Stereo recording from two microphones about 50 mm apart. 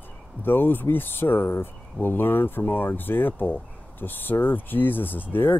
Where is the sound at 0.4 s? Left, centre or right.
Left.